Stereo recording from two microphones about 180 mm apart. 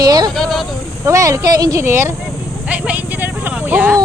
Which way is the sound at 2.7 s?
10° right (ahead or behind).